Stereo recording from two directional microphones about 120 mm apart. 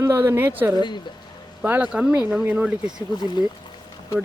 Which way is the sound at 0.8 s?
40° left (ahead or behind).